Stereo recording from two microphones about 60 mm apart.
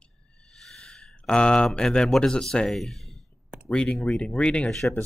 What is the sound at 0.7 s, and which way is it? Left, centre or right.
Speech, centre.